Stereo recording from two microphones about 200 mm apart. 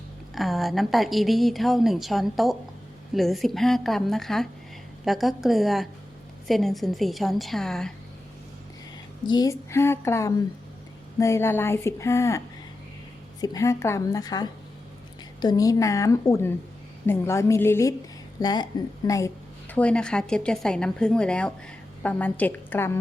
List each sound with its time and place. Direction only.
0.3 s a woman's voice: centre (ahead or behind)
9.2 s speech: 20° left (ahead or behind)
13.4 s speech: 15° left (ahead or behind)
19.7 s a woman's voice: 5° left (ahead or behind)